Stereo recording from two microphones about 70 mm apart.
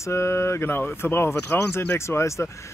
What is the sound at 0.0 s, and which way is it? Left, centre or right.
Speech, left.